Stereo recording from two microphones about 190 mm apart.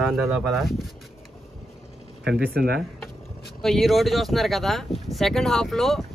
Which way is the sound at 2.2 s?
60° right (ahead or behind).